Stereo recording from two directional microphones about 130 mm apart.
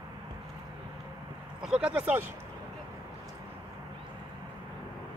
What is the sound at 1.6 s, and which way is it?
Speech, 5° right (ahead or behind).